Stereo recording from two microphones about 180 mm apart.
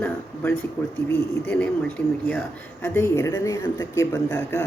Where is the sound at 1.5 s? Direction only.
5° left (ahead or behind).